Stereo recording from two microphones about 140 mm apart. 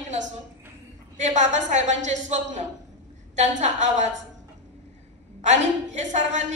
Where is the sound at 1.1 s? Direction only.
60° right (ahead or behind).